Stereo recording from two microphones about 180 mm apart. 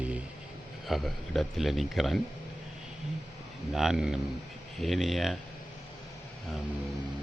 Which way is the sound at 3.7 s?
Centre (ahead or behind).